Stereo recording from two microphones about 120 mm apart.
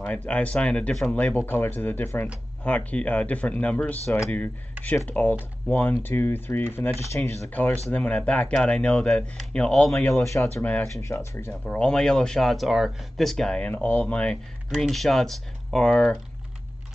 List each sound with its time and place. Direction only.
0.0 s speech: 10° left (ahead or behind)
10.2 s speech: 25° left (ahead or behind)
11.6 s speech: 5° left (ahead or behind)